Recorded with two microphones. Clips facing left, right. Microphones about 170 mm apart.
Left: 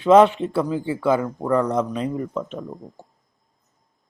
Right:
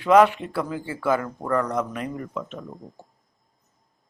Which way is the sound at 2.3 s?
35° left (ahead or behind).